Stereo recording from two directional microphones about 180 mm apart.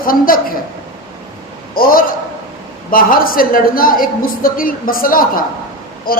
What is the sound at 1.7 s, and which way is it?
A woman's voice, 55° left (ahead or behind).